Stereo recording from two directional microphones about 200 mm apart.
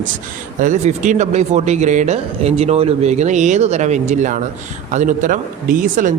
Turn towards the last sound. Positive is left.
turn(degrees=-40)  # may be behind; listen again after turning